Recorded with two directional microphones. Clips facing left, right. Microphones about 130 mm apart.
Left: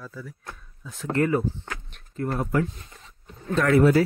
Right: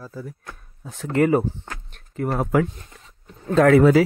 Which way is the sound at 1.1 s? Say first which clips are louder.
Right 4 dB; 80° right.